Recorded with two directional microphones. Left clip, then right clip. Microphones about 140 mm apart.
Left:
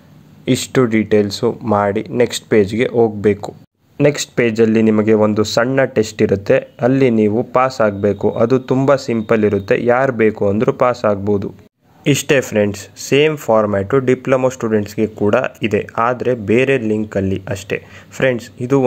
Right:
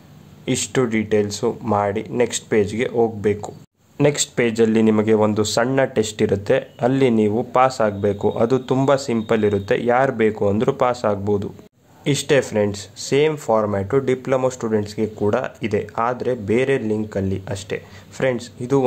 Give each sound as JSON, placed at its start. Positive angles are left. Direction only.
{"t": 0.5, "sound": "speech", "side_deg": 30}